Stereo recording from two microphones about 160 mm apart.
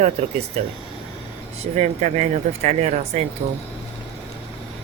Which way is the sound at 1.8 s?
45° right (ahead or behind).